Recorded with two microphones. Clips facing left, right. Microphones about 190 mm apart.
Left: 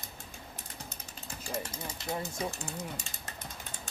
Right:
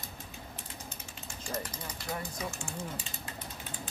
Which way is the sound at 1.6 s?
25° left (ahead or behind).